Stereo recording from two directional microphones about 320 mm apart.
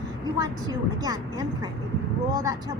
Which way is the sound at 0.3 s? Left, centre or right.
Centre.